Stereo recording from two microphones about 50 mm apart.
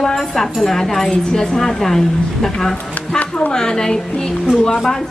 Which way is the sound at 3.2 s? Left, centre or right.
Left.